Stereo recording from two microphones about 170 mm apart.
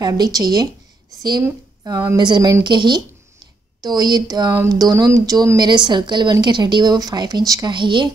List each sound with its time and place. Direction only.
0.0 s speech: 20° right (ahead or behind)